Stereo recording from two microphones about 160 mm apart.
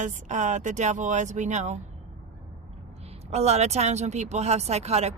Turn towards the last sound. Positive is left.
turn(degrees=-40)  # may be behind; listen again after turning